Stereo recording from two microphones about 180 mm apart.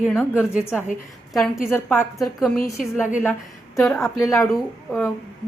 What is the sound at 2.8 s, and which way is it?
Speech, 5° right (ahead or behind).